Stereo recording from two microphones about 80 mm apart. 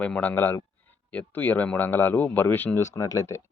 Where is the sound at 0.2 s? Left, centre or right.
Left.